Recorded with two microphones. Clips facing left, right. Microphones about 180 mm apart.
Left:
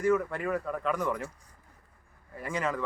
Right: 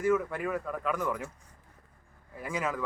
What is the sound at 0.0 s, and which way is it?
Speech, 5° right (ahead or behind).